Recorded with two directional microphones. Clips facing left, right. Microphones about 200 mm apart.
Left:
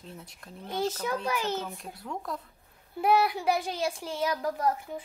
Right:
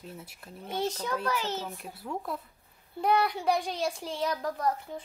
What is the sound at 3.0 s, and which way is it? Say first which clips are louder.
Speech: left 2 dB; 5° left (ahead or behind).